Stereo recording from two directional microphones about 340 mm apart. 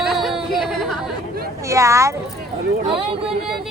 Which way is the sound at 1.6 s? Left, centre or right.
Centre.